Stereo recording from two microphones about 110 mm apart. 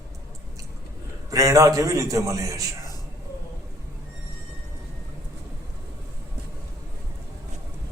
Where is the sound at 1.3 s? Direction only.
30° right (ahead or behind).